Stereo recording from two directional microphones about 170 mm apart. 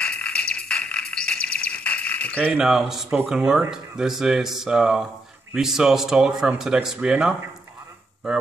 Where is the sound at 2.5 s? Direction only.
5° right (ahead or behind).